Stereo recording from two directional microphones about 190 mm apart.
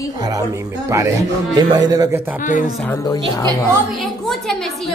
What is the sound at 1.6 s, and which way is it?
Speech, 20° right (ahead or behind).